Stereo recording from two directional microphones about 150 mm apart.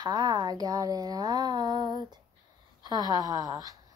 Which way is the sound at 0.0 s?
30° right (ahead or behind).